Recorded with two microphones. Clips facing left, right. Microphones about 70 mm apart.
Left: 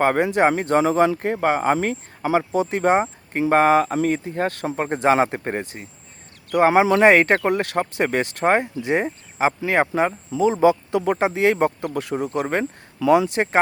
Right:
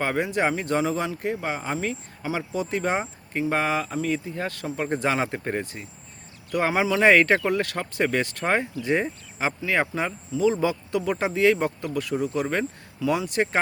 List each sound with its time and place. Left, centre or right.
0.0 s speech: left
4.9 s speech: left